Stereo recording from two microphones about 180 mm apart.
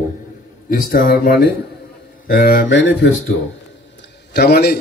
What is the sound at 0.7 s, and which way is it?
Speech, 50° left (ahead or behind).